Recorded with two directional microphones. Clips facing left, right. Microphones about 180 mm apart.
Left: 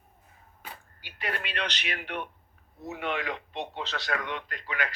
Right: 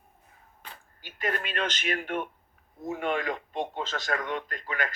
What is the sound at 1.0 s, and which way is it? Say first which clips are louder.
Speech: right 4 dB; 45° right (ahead or behind).